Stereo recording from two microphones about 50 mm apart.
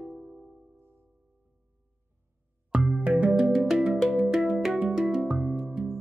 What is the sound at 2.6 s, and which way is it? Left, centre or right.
Music, centre.